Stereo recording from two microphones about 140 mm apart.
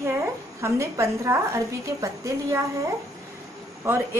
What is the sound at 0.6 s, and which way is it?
A woman's voice, 20° right (ahead or behind).